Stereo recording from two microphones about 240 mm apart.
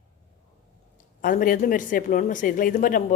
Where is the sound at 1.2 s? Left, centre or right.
Left.